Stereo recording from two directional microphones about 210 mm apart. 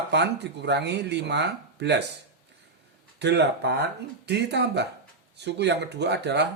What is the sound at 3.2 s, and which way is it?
Speech, 55° right (ahead or behind).